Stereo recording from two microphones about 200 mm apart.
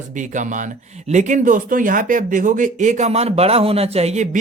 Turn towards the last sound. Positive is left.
turn(degrees=-35)  # may be behind; listen again after turning